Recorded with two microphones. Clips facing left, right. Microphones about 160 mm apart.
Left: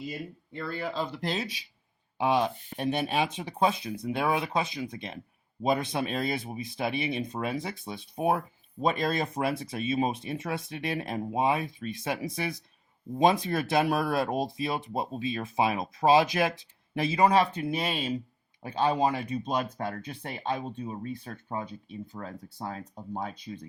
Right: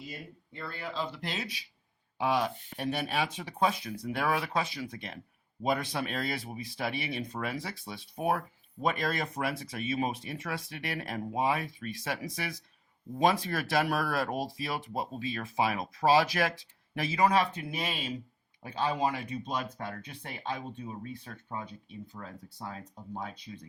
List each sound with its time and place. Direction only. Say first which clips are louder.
0.5 s speech: left 5 dB; 50° left (ahead or behind)